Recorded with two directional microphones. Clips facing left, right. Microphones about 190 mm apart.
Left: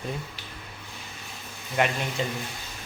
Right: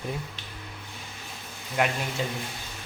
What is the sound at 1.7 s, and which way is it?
Speech, centre (ahead or behind).